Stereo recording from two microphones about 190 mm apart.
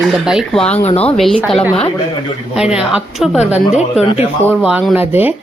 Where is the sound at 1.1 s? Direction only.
Centre (ahead or behind).